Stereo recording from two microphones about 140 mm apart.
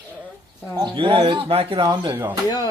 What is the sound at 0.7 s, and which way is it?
Speech, 35° right (ahead or behind).